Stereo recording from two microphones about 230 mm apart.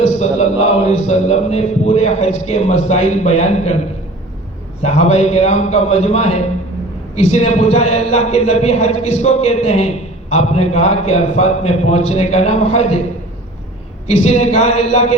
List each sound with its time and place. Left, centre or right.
0.9 s a man's voice: left
4.8 s a man's voice: left
14.3 s a man's voice: left